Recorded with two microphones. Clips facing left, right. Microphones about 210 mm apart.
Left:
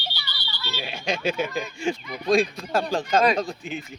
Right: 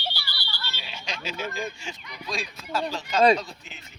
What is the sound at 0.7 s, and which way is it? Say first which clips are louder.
Speech: left 12 dB; 50° left (ahead or behind).